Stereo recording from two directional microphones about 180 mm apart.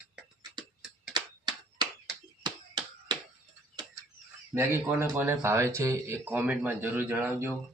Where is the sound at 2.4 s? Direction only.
25° right (ahead or behind).